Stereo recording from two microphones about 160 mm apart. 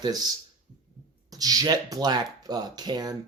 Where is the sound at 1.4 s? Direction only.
25° right (ahead or behind).